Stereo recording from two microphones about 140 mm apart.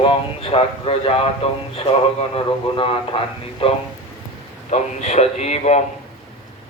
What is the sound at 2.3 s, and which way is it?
Speech, 40° left (ahead or behind).